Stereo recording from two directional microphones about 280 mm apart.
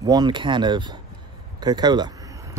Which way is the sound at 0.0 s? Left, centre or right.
Centre.